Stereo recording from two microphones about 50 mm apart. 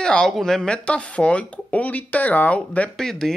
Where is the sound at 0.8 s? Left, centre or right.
Left.